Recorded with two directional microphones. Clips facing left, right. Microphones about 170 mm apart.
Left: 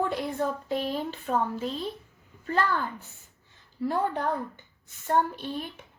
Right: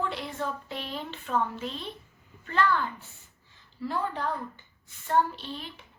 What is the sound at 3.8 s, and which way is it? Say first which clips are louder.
Speech: left 4 dB; 50° left (ahead or behind).